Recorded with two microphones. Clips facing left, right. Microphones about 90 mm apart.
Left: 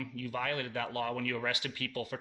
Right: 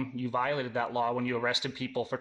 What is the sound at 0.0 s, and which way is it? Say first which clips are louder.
Speech: right 6 dB; 25° right (ahead or behind).